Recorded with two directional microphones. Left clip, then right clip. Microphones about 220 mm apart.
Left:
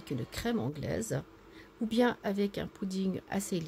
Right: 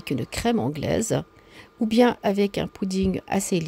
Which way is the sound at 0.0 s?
35° right (ahead or behind).